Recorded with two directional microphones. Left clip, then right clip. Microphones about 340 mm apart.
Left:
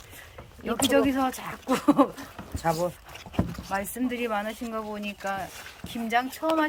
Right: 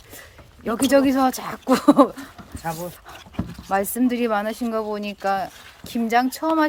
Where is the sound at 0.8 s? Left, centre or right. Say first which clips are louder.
Right 6 dB; centre.